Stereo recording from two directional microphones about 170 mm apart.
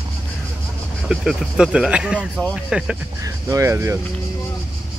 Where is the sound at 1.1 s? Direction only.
Centre (ahead or behind).